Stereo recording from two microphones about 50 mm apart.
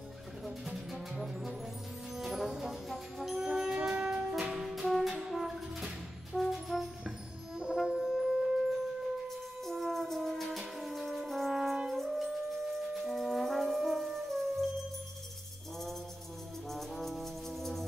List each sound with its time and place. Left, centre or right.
0.5 s music: centre
2.1 s brass instrument: centre
2.9 s music: centre
3.3 s music: centre
6.3 s music: centre
7.1 s brass instrument: centre
9.7 s music: centre
10.8 s french horn: centre
11.9 s brass instrument: centre
16.6 s music: centre